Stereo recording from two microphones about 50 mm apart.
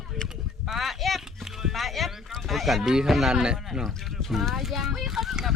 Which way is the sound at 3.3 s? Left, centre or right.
Centre.